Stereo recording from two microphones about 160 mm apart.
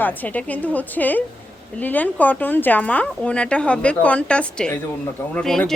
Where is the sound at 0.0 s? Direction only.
10° left (ahead or behind).